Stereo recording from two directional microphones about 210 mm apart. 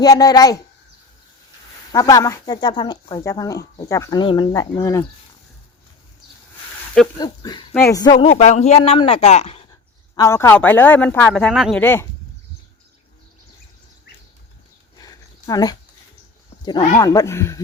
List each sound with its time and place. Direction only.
0.0 s speech: 15° left (ahead or behind)
1.9 s speech: 15° left (ahead or behind)
7.2 s speech: 20° left (ahead or behind)
10.2 s speech: 15° left (ahead or behind)
14.9 s a sound: 20° left (ahead or behind)
17.0 s speech: 15° left (ahead or behind)